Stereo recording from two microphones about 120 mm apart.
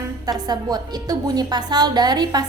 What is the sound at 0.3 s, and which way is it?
A woman's voice, 35° right (ahead or behind).